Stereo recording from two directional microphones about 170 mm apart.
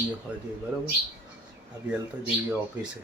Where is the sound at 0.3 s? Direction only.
10° right (ahead or behind).